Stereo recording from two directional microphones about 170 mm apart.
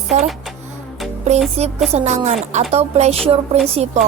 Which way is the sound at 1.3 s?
40° right (ahead or behind).